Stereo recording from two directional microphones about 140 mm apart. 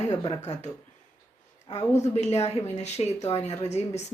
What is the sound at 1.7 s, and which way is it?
A woman's voice, 50° left (ahead or behind).